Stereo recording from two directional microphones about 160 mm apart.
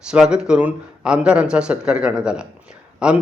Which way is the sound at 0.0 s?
5° right (ahead or behind).